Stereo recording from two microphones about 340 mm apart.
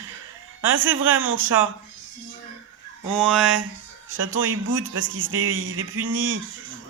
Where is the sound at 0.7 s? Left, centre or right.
Right.